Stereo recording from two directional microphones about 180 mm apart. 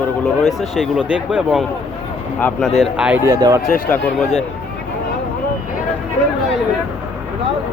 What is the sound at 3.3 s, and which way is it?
Speech, 20° right (ahead or behind).